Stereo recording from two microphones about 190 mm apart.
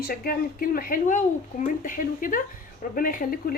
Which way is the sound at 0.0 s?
50° left (ahead or behind).